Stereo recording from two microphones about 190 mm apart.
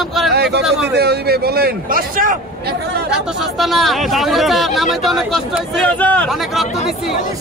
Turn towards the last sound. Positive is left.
turn(degrees=0)  # may be behind; listen again after turning